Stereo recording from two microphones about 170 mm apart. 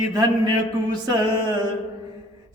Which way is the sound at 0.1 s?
25° right (ahead or behind).